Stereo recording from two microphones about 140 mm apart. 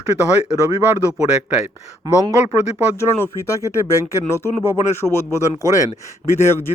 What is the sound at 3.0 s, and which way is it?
Speech, 20° left (ahead or behind).